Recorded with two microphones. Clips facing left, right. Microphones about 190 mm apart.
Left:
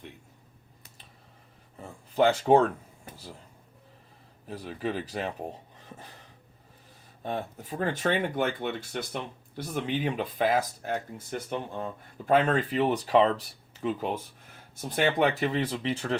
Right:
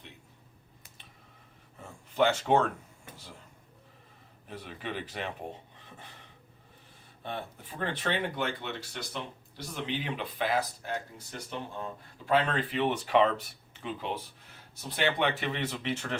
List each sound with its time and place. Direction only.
1.8 s a sound: 35° left (ahead or behind)
4.4 s speech: 35° left (ahead or behind)
7.2 s speech: 40° left (ahead or behind)